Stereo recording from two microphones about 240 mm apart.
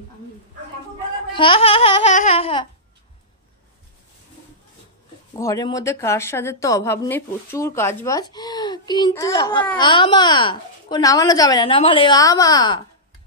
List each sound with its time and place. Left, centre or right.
1.3 s speech: left
5.3 s speech: centre